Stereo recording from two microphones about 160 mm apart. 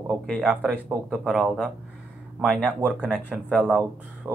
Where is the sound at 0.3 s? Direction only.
Centre (ahead or behind).